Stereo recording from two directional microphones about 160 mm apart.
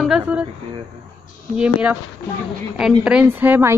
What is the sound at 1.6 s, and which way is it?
Speech, 10° right (ahead or behind).